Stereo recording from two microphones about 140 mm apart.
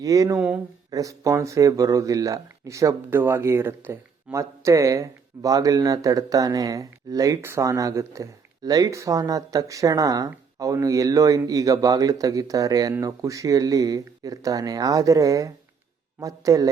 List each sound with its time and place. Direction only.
0.0 s speech: 25° right (ahead or behind)
0.3 s speech: 10° right (ahead or behind)
0.9 s speech: 25° right (ahead or behind)